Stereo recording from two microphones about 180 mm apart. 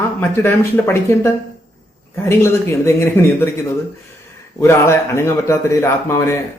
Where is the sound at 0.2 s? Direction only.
15° left (ahead or behind).